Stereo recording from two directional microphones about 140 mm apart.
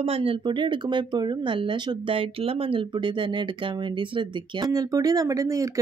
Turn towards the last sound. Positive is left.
turn(degrees=-25)  # may be behind; listen again after turning